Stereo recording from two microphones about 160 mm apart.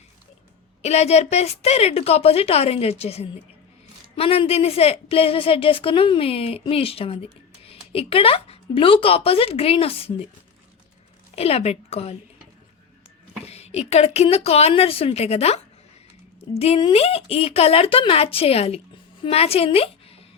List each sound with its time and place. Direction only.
0.8 s speech: 40° left (ahead or behind)
11.3 s speech: 40° left (ahead or behind)
13.4 s a woman's voice: 40° left (ahead or behind)